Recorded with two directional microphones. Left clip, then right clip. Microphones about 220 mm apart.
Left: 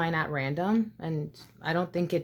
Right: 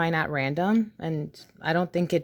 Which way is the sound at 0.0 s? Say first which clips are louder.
Right 4 dB; 40° right (ahead or behind).